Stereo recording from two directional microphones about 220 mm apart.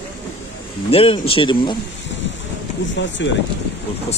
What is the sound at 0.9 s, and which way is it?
Speech, 25° left (ahead or behind).